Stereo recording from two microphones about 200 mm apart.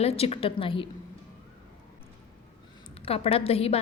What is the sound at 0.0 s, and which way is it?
Speech, 30° left (ahead or behind).